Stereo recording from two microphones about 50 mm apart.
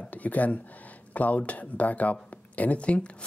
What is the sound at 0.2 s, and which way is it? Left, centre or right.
Speech, left.